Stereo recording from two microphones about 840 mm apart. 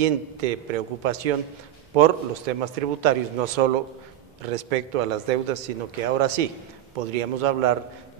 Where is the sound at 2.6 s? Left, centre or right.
Right.